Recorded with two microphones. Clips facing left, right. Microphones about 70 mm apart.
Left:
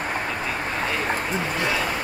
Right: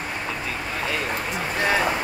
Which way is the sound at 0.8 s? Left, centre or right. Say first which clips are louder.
Left 1 dB; left.